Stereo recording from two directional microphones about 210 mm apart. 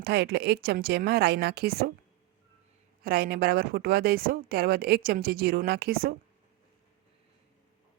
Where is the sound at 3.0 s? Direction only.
45° right (ahead or behind).